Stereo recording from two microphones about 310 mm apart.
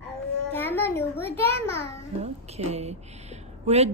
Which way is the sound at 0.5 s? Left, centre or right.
Centre.